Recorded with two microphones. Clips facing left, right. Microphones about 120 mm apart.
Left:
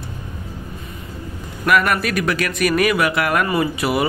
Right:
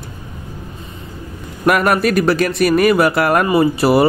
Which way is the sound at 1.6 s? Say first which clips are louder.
Right 4 dB; 40° right (ahead or behind).